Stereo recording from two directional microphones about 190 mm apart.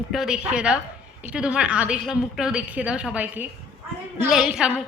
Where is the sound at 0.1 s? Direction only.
5° right (ahead or behind).